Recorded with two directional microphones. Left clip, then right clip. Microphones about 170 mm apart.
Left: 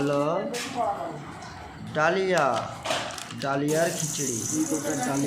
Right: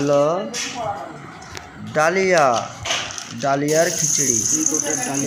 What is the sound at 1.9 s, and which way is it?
Speech, 30° right (ahead or behind).